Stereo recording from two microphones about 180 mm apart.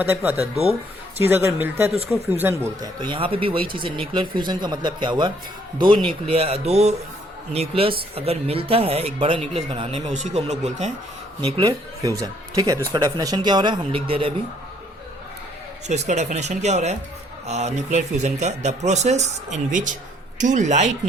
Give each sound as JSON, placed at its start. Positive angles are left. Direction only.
{"t": 0.0, "sound": "speech", "side_deg": -10}
{"t": 0.3, "sound": "speech", "side_deg": -35}
{"t": 1.2, "sound": "speech", "side_deg": -15}
{"t": 2.8, "sound": "speech", "side_deg": -25}
{"t": 11.6, "sound": "speech", "side_deg": -20}
{"t": 15.9, "sound": "speech", "side_deg": -40}